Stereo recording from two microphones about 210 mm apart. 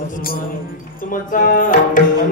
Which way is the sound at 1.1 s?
40° left (ahead or behind).